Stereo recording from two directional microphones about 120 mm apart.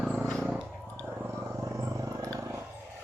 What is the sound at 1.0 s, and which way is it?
Wild animals, 15° right (ahead or behind).